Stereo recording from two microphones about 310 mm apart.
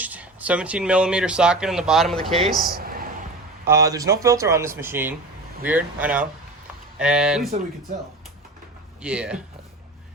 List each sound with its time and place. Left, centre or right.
0.0 s speech: centre
2.7 s a sound: right
3.7 s speech: centre
9.0 s speech: centre